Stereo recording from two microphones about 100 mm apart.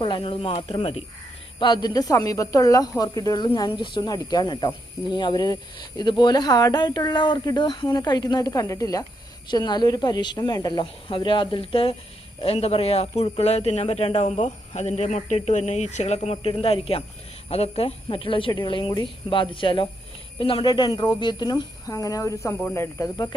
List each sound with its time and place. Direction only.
0.0 s speech: 55° left (ahead or behind); by 1.0 s 90° left
1.5 s speech: 50° left (ahead or behind)
11.1 s a woman's voice: 55° left (ahead or behind)
12.4 s speech: 80° left
13.2 s a woman's voice: 75° left (ahead or behind); by 21.9 s 45° left (ahead or behind)
21.9 s speech: 35° left (ahead or behind)
22.5 s speech: 20° left (ahead or behind)